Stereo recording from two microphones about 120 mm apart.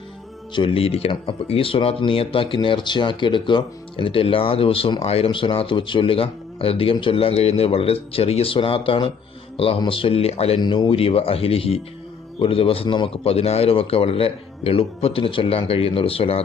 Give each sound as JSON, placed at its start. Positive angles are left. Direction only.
{"t": 0.5, "sound": "speech", "side_deg": 45}
{"t": 10.6, "sound": "speech", "side_deg": 40}